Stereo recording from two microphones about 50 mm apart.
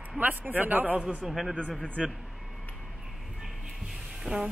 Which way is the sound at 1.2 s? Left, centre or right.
Centre.